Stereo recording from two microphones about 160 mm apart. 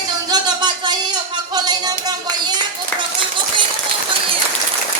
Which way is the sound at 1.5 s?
25° right (ahead or behind).